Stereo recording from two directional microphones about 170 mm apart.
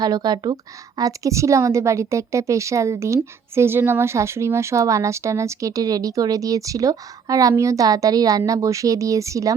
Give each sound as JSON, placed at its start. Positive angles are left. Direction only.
{"t": 0.0, "sound": "a woman's voice", "side_deg": -25}